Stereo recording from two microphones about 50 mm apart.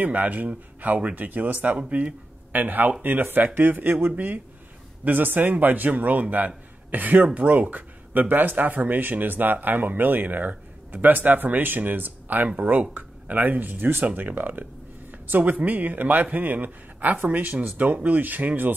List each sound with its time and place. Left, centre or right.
0.0 s speech: right